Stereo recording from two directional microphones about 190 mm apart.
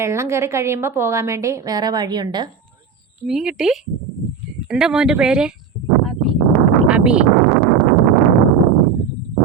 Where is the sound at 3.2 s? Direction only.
Centre (ahead or behind).